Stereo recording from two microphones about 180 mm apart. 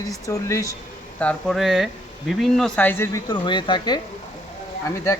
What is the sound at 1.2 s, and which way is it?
Speech, centre (ahead or behind).